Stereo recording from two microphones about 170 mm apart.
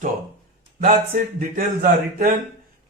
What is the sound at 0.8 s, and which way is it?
A man's voice, 55° right (ahead or behind).